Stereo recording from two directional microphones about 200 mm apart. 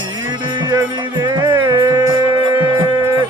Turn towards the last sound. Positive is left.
turn(degrees=-15)  # may be behind; listen again after turning